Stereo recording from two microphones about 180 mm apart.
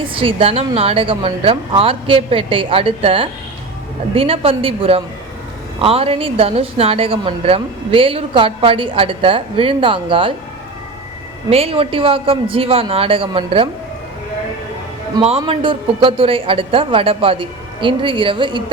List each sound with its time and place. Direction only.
0.1 s a woman's voice: 30° right (ahead or behind)
11.5 s a woman's voice: 30° right (ahead or behind)
15.4 s a man's voice: 30° right (ahead or behind)